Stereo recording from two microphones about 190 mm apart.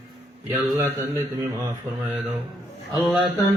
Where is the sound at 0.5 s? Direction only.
10° right (ahead or behind).